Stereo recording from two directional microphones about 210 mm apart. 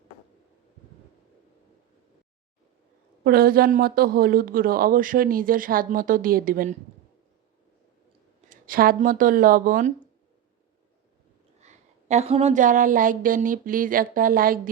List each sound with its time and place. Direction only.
3.2 s speech: 45° right (ahead or behind)
8.4 s speech: 40° right (ahead or behind)
11.6 s a woman's voice: 35° right (ahead or behind)